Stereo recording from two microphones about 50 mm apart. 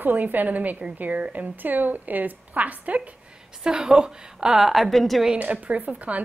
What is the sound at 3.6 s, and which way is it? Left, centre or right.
A woman's voice, centre.